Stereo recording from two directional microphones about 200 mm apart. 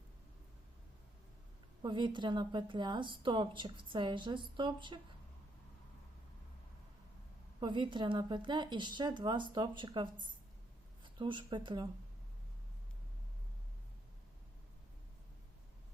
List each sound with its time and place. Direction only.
1.8 s a woman's voice: 20° right (ahead or behind)
7.6 s a woman's voice: 25° right (ahead or behind)